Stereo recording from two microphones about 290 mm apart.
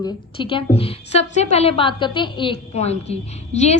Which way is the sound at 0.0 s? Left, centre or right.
Centre.